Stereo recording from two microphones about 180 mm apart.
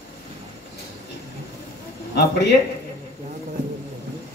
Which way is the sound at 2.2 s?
70° left (ahead or behind).